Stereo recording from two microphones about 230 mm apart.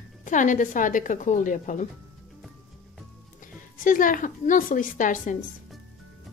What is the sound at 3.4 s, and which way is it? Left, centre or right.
A woman's voice, left.